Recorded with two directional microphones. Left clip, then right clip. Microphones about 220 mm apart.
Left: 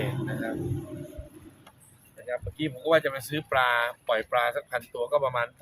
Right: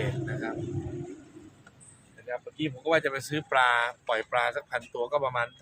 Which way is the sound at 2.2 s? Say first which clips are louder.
Left 2 dB; 5° left (ahead or behind).